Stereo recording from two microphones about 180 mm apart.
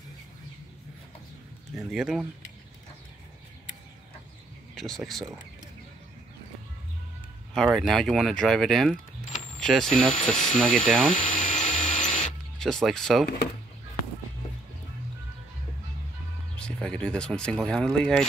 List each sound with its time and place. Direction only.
1.8 s speech: centre (ahead or behind)
4.7 s speech: centre (ahead or behind)
7.5 s speech: centre (ahead or behind)
11.1 s drill: 45° left (ahead or behind)
12.5 s speech: 5° left (ahead or behind)
16.5 s speech: 5° left (ahead or behind)